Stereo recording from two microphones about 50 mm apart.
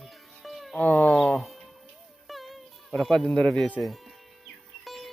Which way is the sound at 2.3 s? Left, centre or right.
Centre.